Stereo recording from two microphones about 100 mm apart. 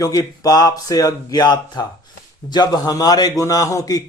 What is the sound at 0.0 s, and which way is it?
A man's voice, 35° left (ahead or behind).